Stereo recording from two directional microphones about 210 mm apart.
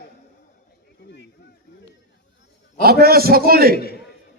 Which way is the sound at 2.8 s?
45° right (ahead or behind).